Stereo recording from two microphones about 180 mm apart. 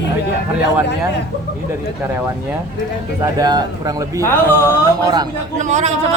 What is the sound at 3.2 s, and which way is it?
Speech, 20° right (ahead or behind).